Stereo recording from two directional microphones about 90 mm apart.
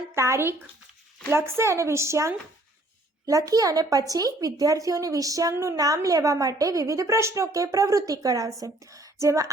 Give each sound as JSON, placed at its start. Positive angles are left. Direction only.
{"t": 0.1, "sound": "speech", "side_deg": -30}